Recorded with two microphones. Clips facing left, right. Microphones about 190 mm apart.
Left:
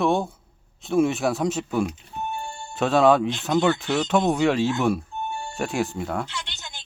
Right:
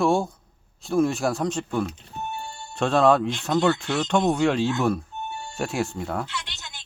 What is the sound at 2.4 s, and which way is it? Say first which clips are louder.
Music: left 2 dB; 45° left (ahead or behind).